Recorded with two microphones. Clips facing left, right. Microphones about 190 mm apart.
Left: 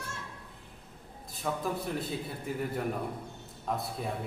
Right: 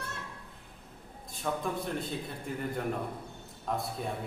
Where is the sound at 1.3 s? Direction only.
Centre (ahead or behind).